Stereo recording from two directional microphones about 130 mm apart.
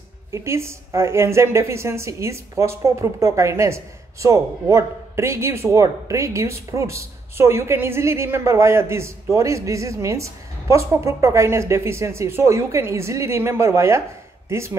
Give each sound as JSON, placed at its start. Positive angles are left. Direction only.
{"t": 0.3, "sound": "a woman's voice", "side_deg": -20}